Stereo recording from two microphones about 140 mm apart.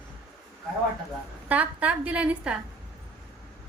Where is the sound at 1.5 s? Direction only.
10° right (ahead or behind).